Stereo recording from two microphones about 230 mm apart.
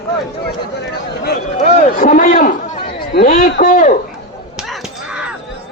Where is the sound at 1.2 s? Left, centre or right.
Left.